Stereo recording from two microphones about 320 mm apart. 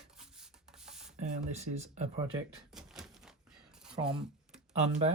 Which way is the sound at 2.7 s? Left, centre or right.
Centre.